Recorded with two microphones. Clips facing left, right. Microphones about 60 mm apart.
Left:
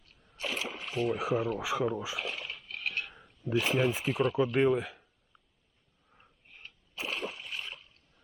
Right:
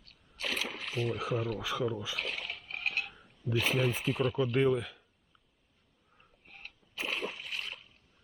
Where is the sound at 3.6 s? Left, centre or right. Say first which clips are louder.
Left 2 dB; centre.